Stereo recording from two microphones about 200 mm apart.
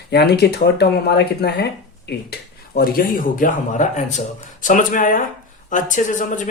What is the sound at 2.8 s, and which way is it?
Speech, 45° left (ahead or behind).